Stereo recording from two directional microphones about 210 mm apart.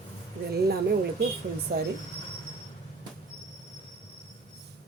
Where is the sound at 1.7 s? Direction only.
50° right (ahead or behind).